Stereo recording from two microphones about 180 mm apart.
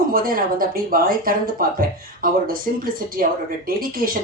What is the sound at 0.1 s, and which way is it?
A woman's voice, 55° right (ahead or behind).